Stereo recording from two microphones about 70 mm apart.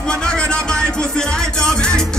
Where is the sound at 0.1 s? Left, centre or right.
Centre.